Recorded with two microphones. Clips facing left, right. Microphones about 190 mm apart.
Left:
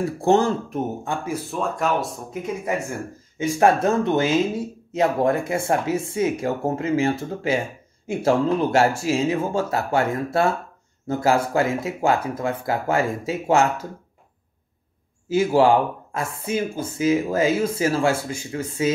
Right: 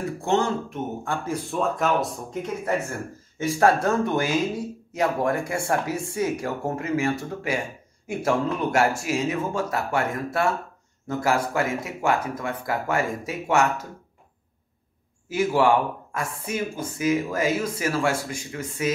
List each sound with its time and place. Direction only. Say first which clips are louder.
0.2 s speech: left 5 dB; 35° left (ahead or behind)
1.0 s speech: left 1 dB; 15° left (ahead or behind)
1.3 s speech: right 3 dB; centre (ahead or behind)
3.3 s speech: left 2 dB; 20° left (ahead or behind)
15.2 s speech: left 4 dB; 30° left (ahead or behind)